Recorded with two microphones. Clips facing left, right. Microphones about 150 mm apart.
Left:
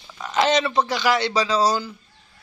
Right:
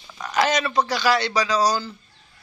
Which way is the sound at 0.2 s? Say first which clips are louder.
Left 2 dB; 20° left (ahead or behind).